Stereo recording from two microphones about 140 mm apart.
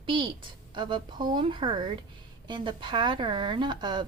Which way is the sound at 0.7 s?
35° right (ahead or behind).